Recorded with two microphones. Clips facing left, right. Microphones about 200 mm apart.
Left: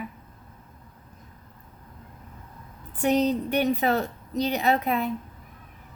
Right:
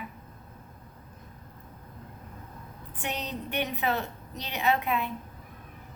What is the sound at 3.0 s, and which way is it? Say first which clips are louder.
A woman's voice: left 13 dB; 40° left (ahead or behind).